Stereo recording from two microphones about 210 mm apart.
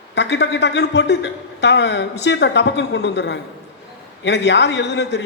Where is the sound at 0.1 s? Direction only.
55° left (ahead or behind).